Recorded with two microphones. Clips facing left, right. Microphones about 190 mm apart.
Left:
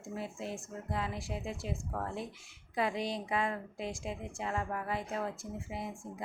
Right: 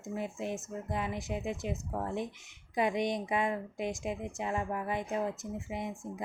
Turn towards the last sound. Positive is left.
turn(degrees=-20)  # may be behind; listen again after turning